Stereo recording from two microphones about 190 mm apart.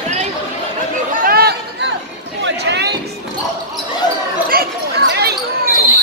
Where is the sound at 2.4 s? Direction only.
60° right (ahead or behind).